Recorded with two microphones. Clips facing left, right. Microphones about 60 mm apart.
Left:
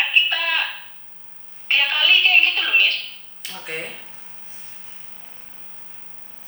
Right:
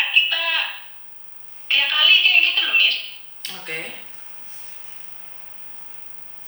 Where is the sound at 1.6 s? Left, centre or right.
Left.